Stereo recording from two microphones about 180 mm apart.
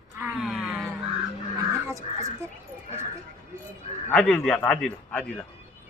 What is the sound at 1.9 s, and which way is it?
Speech, 15° right (ahead or behind).